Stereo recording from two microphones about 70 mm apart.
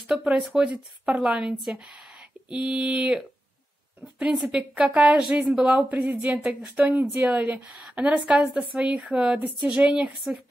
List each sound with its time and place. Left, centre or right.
0.0 s a woman's voice: centre
2.5 s a woman's voice: centre